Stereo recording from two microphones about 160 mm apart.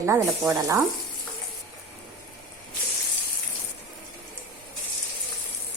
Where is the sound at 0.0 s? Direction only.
20° right (ahead or behind).